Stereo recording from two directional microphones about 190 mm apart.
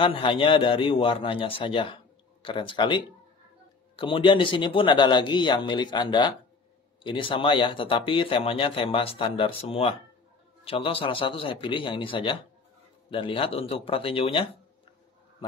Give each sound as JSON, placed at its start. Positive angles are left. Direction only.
{"t": 0.0, "sound": "speech", "side_deg": 25}